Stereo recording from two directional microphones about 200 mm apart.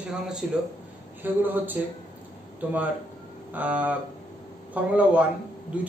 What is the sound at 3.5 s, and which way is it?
Speech, 10° right (ahead or behind).